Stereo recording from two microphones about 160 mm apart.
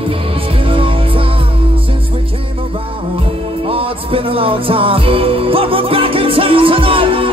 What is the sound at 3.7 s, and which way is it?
Music, 35° right (ahead or behind).